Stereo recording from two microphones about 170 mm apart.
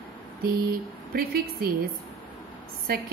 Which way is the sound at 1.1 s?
65° right (ahead or behind).